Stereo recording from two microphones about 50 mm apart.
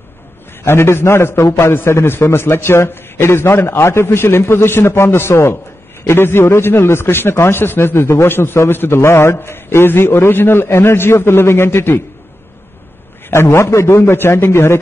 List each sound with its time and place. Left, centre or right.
0.7 s a man's voice: left
13.3 s a man's voice: left